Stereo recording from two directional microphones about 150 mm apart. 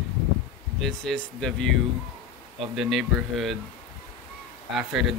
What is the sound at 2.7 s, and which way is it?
Speech, centre (ahead or behind).